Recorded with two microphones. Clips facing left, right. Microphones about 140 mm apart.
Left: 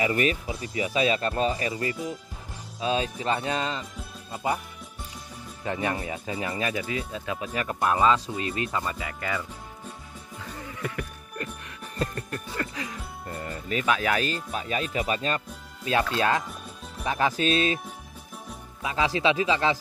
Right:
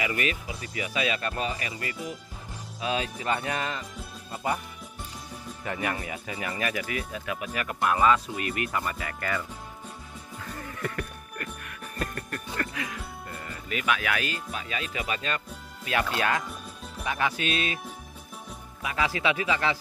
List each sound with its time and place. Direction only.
0.0 s speech: 35° left (ahead or behind)
5.6 s speech: 25° left (ahead or behind)
10.5 s music: 15° left (ahead or behind)
11.3 s music: 25° left (ahead or behind)
16.2 s speech: 30° left (ahead or behind)
18.8 s speech: 25° left (ahead or behind)